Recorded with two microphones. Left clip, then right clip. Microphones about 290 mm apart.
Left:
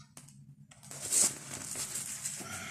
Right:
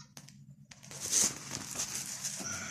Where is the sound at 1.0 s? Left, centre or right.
Centre.